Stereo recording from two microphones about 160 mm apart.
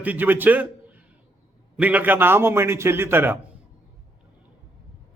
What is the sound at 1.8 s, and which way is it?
A man's voice, 10° right (ahead or behind).